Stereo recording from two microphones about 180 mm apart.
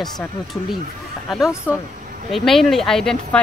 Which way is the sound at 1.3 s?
Centre (ahead or behind).